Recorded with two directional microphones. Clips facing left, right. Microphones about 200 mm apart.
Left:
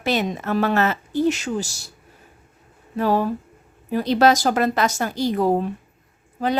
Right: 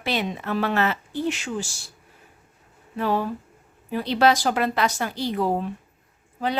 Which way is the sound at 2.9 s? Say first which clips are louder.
Left 4 dB; 40° left (ahead or behind).